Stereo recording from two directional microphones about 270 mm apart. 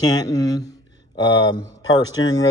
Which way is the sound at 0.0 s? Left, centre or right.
Centre.